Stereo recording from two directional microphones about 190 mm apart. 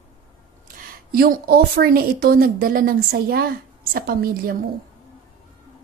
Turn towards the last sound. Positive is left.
turn(degrees=-50)  # may be behind; listen again after turning